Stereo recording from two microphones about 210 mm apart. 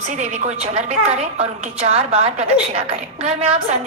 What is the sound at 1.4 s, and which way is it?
A woman's voice, 30° right (ahead or behind).